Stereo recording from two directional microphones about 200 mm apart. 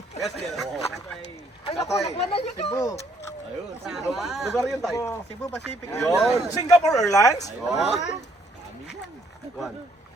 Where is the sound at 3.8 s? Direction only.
Centre (ahead or behind).